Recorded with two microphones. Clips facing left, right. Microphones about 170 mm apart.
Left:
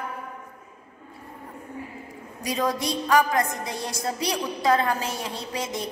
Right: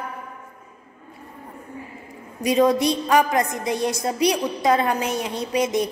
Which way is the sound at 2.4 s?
20° right (ahead or behind).